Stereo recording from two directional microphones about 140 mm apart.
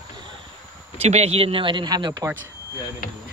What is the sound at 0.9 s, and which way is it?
A man's voice, 50° right (ahead or behind).